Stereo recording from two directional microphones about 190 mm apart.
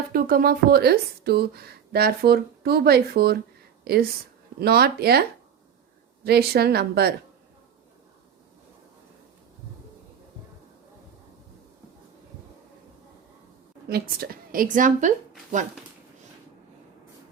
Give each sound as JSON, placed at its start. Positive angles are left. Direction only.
{"t": 0.1, "sound": "speech", "side_deg": -50}
{"t": 6.2, "sound": "speech", "side_deg": -55}
{"t": 13.8, "sound": "a woman's voice", "side_deg": -55}